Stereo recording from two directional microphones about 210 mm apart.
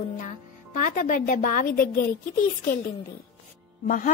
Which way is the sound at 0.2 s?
35° left (ahead or behind).